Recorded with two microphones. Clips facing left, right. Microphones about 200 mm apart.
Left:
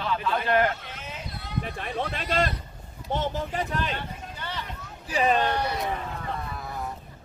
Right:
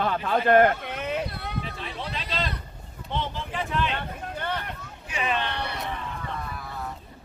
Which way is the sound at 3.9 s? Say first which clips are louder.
Right 3 dB; 55° right (ahead or behind).